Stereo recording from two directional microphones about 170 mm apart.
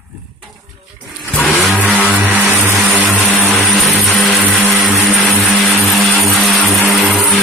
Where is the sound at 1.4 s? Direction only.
5° left (ahead or behind).